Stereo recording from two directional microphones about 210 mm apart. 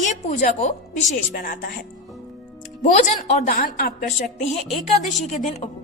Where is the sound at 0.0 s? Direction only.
35° left (ahead or behind).